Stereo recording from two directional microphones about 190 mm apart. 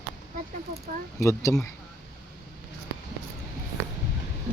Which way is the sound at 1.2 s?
15° left (ahead or behind).